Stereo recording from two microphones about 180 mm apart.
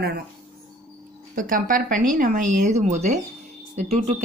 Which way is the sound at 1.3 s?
50° right (ahead or behind).